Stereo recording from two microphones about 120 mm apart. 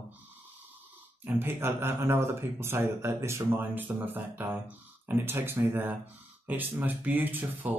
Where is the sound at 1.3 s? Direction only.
20° right (ahead or behind).